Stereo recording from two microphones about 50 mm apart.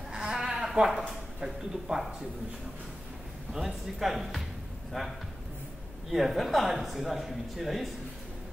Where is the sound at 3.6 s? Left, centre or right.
Centre.